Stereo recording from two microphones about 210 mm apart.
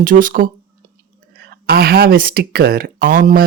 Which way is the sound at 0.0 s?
40° right (ahead or behind).